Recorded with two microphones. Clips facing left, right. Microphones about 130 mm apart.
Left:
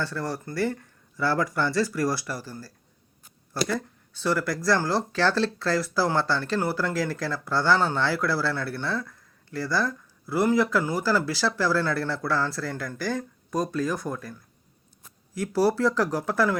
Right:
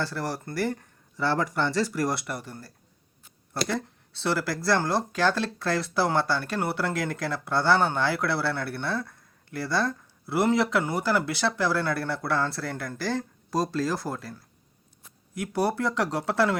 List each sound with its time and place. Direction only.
0.1 s speech: 25° right (ahead or behind)
14.1 s speech: 25° right (ahead or behind)
15.5 s speech: 20° right (ahead or behind)